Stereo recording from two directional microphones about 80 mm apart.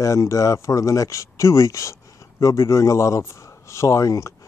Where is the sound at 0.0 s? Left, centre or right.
Left.